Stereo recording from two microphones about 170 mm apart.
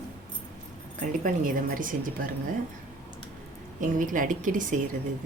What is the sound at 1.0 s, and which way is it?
Speech, 50° right (ahead or behind).